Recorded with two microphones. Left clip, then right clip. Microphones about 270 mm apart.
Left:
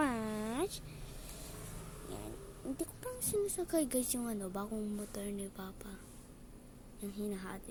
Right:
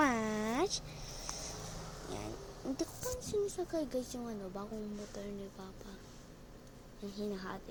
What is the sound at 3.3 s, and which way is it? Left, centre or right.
Speech, left.